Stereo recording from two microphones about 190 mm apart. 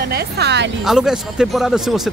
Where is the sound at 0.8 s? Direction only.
Centre (ahead or behind).